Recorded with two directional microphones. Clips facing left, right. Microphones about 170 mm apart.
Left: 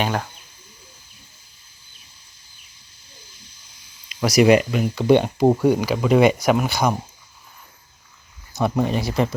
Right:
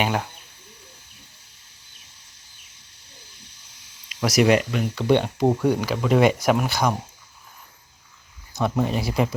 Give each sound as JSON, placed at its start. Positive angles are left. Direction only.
{"t": 0.0, "sound": "speech", "side_deg": -10}
{"t": 3.1, "sound": "a sound", "side_deg": -65}
{"t": 4.1, "sound": "speech", "side_deg": 0}
{"t": 8.5, "sound": "speech", "side_deg": 5}